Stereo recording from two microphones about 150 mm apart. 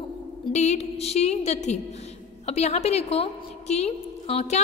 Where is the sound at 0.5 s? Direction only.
50° left (ahead or behind).